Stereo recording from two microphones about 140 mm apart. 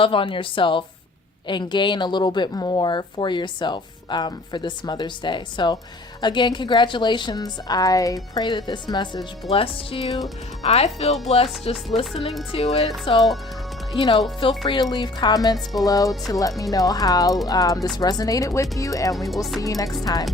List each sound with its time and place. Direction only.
0.0 s a woman's voice: 40° left (ahead or behind)
9.5 s speech: 45° left (ahead or behind)
13.9 s a woman's voice: 35° left (ahead or behind)
19.1 s music: centre (ahead or behind)
19.5 s speech: 25° left (ahead or behind)